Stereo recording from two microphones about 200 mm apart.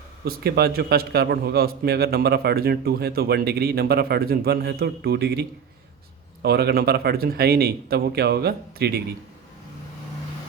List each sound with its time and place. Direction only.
0.3 s a man's voice: 50° right (ahead or behind)